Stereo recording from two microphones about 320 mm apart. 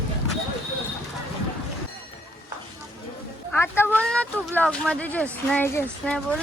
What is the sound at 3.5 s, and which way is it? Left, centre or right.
Speech, centre.